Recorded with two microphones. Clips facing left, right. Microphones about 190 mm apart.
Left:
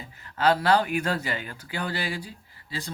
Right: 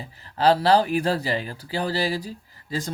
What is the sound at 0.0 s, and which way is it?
Speech, 35° right (ahead or behind).